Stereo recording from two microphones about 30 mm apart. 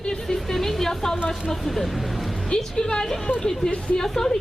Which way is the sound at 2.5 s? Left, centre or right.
Left.